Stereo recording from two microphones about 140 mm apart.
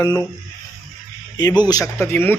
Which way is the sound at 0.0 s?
20° left (ahead or behind).